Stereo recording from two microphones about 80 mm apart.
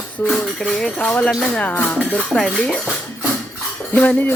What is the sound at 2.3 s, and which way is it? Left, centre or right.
Speech, centre.